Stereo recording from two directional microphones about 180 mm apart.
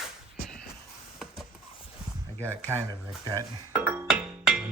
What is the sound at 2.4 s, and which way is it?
Speech, 10° left (ahead or behind).